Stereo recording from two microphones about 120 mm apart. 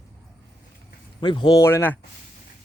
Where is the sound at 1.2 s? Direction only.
40° left (ahead or behind).